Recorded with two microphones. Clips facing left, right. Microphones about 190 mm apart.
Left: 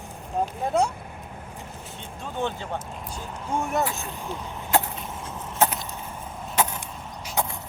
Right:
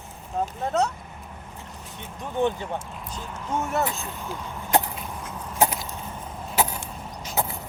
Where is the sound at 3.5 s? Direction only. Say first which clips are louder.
Even; 15° left (ahead or behind).